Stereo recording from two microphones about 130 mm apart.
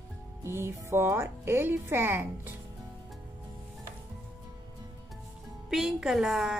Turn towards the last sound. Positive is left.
turn(degrees=0)  # may be behind; listen again after turning